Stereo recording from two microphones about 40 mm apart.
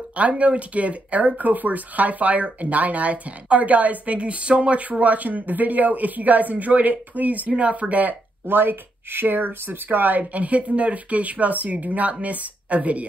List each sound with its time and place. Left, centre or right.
0.1 s speech: right
7.5 s speech: right
8.5 s speech: right